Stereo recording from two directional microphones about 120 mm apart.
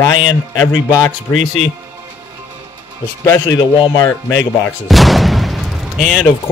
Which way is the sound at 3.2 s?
30° left (ahead or behind).